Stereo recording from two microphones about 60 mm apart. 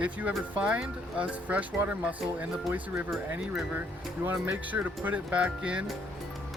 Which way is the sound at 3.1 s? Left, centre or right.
Centre.